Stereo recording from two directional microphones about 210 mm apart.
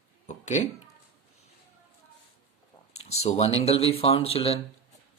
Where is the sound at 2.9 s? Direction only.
30° left (ahead or behind).